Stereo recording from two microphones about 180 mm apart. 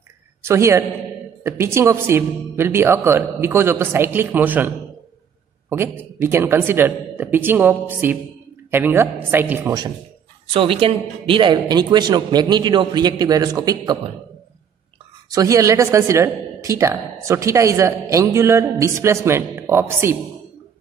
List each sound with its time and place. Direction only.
0.4 s a man's voice: 15° right (ahead or behind)
15.3 s a woman's voice: 20° right (ahead or behind)